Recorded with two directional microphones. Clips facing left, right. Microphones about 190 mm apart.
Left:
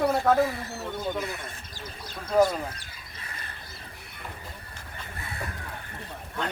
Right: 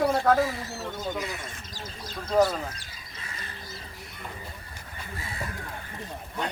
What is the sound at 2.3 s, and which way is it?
Speech, 10° left (ahead or behind).